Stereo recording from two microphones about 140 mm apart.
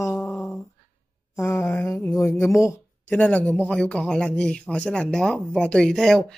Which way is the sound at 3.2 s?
10° left (ahead or behind).